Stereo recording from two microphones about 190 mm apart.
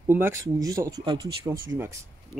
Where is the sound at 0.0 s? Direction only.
15° right (ahead or behind).